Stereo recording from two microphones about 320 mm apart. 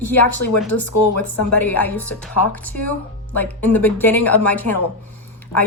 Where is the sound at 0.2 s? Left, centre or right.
Left.